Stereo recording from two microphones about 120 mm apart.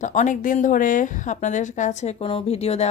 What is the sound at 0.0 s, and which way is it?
A woman's voice, 85° left.